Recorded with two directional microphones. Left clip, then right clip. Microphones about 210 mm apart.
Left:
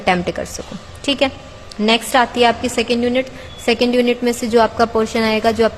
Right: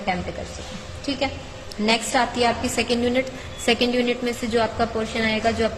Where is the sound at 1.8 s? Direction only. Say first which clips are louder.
Left 6 dB; 20° left (ahead or behind).